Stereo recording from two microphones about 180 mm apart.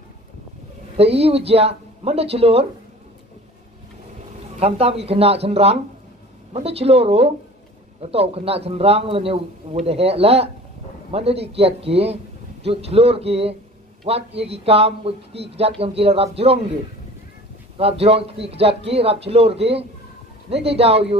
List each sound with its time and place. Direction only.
0.9 s a man's voice: 35° right (ahead or behind)
4.6 s a man's voice: 35° right (ahead or behind)
17.7 s a man's voice: 35° right (ahead or behind)